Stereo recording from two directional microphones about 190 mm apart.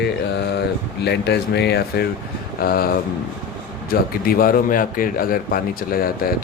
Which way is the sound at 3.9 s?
50° left (ahead or behind).